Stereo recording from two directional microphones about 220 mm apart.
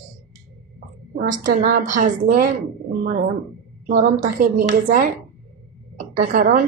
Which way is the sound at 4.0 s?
40° right (ahead or behind).